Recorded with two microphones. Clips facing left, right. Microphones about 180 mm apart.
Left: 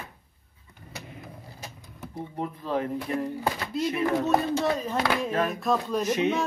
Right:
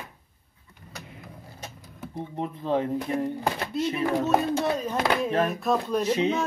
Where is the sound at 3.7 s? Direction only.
Centre (ahead or behind).